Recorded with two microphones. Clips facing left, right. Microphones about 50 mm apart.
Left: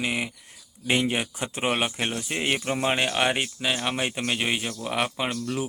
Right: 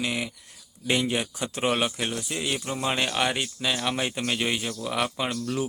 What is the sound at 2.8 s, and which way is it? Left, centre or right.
Speech, left.